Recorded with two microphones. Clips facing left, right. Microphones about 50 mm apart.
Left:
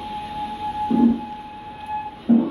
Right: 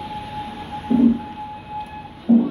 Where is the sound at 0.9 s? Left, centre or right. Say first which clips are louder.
Right 2 dB; right.